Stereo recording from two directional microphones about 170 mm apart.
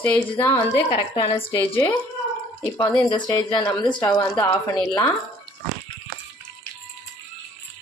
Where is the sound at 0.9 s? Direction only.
30° left (ahead or behind).